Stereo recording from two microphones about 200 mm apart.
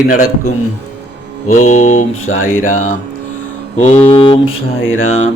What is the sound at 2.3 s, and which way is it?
Speech, 85° left.